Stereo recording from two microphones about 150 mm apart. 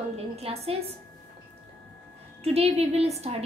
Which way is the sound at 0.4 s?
40° right (ahead or behind).